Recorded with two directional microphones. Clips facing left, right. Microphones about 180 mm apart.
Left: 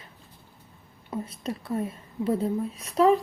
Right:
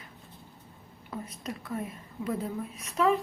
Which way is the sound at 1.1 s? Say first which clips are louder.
Left 5 dB; 30° left (ahead or behind).